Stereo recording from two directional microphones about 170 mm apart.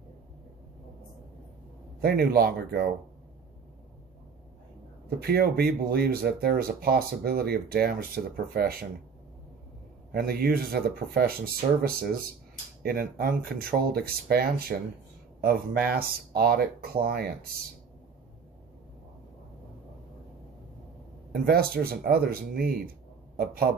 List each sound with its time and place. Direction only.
2.0 s speech: 65° right (ahead or behind)
5.2 s speech: 65° right (ahead or behind)
10.1 s speech: 65° right (ahead or behind)
21.3 s speech: 60° right (ahead or behind)